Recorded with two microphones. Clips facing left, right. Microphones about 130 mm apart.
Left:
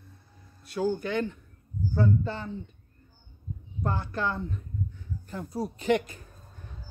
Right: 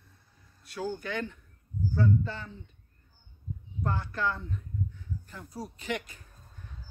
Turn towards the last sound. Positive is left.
turn(degrees=35)  # may be behind; listen again after turning